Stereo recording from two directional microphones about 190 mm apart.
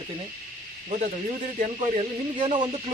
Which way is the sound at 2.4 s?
25° right (ahead or behind).